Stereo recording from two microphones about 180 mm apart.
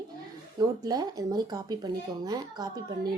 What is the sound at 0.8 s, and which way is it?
Speech, 20° right (ahead or behind).